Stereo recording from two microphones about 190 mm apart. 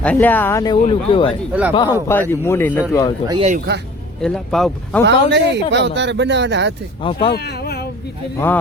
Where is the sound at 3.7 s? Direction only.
60° right (ahead or behind).